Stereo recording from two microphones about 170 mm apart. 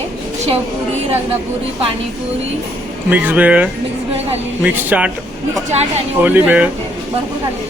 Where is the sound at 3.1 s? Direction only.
10° right (ahead or behind).